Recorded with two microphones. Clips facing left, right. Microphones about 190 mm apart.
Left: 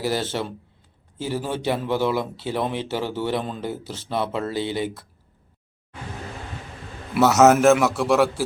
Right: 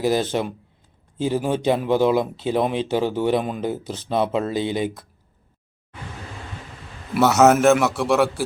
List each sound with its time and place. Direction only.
0.0 s speech: 15° right (ahead or behind)
7.2 s a man's voice: centre (ahead or behind)